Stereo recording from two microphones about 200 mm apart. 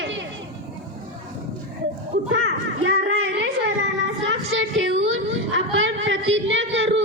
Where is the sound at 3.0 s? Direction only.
55° right (ahead or behind).